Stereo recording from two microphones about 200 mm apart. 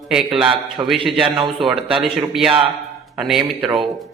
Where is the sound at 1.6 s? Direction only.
Centre (ahead or behind).